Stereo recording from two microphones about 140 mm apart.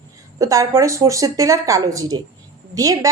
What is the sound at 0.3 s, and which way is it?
Speech, 25° right (ahead or behind).